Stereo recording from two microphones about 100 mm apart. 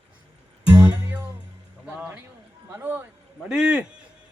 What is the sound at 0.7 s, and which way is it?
Music, 15° right (ahead or behind).